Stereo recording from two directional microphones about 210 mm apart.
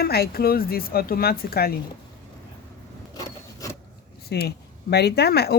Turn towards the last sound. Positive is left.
turn(degrees=50)  # may be behind; listen again after turning